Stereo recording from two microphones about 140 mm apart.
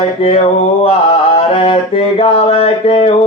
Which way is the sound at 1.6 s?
45° left (ahead or behind).